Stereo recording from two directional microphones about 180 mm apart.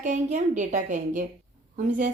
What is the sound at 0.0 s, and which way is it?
A woman's voice, 45° right (ahead or behind).